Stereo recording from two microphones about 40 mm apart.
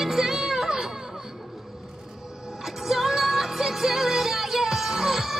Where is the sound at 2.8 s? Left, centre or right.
Centre.